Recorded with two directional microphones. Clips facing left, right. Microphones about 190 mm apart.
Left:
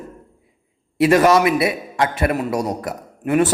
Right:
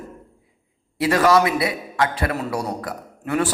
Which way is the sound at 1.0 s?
25° left (ahead or behind).